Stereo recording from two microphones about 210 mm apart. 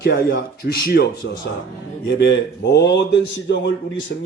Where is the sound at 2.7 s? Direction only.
55° left (ahead or behind).